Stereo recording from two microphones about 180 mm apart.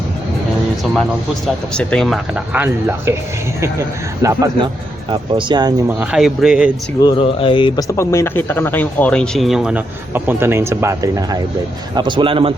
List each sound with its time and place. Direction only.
1.7 s a man's voice: 5° left (ahead or behind); by 5.7 s 25° right (ahead or behind)
5.9 s speech: 5° right (ahead or behind)
7.0 s a man's voice: 30° left (ahead or behind); by 12.5 s 30° right (ahead or behind)